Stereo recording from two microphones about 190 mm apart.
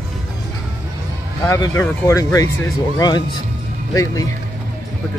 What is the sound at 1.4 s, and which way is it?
Speech, 15° left (ahead or behind).